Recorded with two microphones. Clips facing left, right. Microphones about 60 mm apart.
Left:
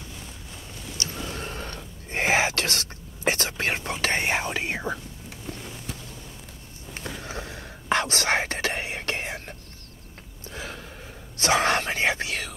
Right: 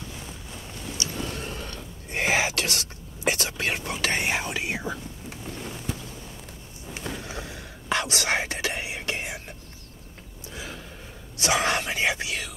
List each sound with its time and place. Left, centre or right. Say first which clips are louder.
0.9 s a sound: right 1 dB; left
6.9 s whispering: right 1 dB; left
10.5 s gasp: left 2 dB; left
11.3 s whispering: left 2 dB; left